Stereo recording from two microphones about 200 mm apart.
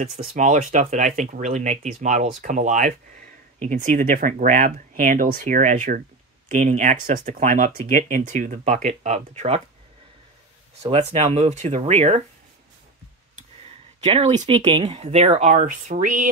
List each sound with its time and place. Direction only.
0.0 s speech: 35° right (ahead or behind)
10.8 s speech: 35° right (ahead or behind)
14.0 s speech: 30° right (ahead or behind)